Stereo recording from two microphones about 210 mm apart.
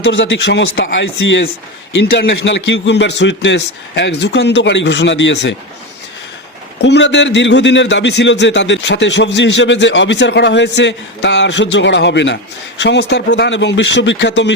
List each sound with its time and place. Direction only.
0.0 s a man's voice: 60° left (ahead or behind)
6.8 s a man's voice: 55° left (ahead or behind)